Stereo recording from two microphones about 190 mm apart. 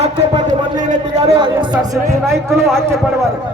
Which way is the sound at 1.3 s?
25° right (ahead or behind).